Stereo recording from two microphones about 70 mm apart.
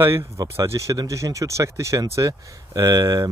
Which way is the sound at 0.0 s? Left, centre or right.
Right.